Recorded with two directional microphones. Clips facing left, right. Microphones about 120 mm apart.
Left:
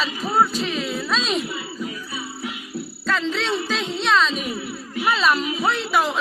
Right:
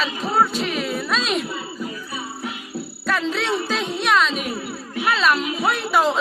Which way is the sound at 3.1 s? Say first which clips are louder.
Right 1 dB; 10° right (ahead or behind).